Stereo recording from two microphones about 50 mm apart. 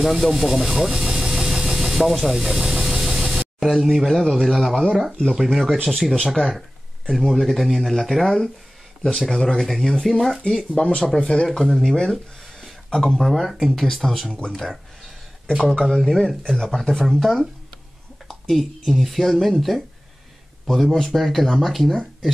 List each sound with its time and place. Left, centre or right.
0.0 s speech: centre
10.8 s speech: left
11.4 s speech: centre
20.6 s speech: centre